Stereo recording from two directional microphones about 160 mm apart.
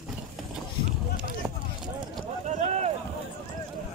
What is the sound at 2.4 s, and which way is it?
Boat, 45° right (ahead or behind).